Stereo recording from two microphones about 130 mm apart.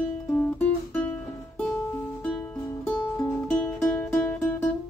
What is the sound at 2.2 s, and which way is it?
Music, 5° left (ahead or behind).